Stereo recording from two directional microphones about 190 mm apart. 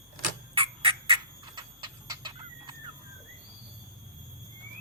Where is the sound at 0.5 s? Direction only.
30° right (ahead or behind).